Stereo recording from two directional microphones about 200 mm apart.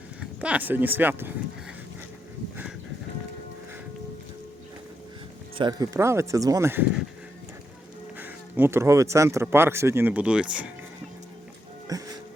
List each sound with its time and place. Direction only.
0.2 s speech: 5° right (ahead or behind)
5.5 s speech: 20° right (ahead or behind)
8.2 s speech: 10° right (ahead or behind)
11.9 s music: 15° right (ahead or behind)